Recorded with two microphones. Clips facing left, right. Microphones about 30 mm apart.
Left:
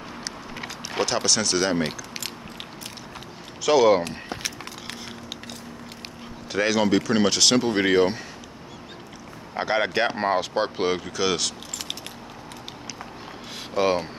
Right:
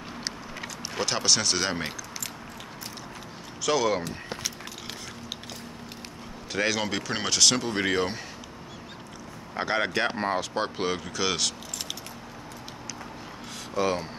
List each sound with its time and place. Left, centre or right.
1.0 s speech: centre
3.6 s speech: left
6.5 s speech: centre
7.2 s speech: centre
9.5 s speech: centre
13.7 s speech: left